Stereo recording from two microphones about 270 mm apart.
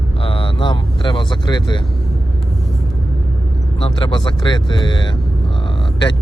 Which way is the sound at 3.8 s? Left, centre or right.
Centre.